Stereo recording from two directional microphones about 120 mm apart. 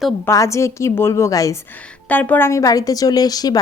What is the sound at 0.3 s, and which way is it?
Speech, 25° left (ahead or behind).